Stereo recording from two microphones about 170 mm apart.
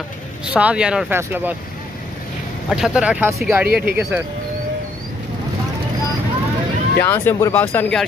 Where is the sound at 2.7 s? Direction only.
5° right (ahead or behind).